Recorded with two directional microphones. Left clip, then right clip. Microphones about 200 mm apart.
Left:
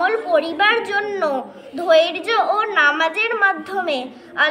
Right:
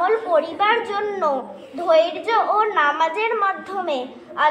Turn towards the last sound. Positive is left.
turn(degrees=5)  # may be behind; listen again after turning